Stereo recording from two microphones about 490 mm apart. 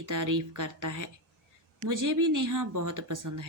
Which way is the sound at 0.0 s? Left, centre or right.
Right.